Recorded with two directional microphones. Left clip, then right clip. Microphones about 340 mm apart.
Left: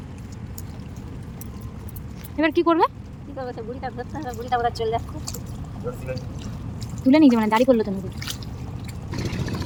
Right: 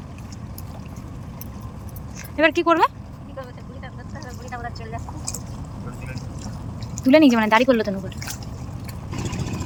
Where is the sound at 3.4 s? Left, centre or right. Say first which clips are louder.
Left 8 dB; left.